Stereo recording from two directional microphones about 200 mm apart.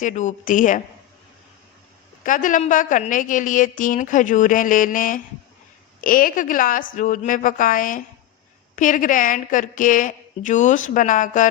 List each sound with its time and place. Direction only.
0.0 s a woman's voice: 40° left (ahead or behind)
2.2 s a woman's voice: 40° left (ahead or behind)